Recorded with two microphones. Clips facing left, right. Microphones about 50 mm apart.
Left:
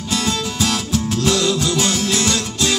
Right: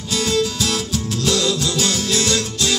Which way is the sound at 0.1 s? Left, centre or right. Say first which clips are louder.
Right 2 dB; left.